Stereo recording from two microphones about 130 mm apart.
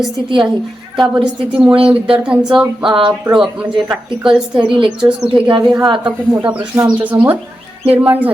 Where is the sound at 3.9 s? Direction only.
5° right (ahead or behind).